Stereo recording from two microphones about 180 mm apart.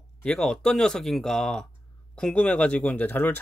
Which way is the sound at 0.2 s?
5° left (ahead or behind).